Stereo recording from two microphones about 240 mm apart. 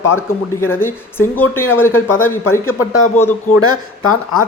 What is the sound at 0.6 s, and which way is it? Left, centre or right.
Speech, centre.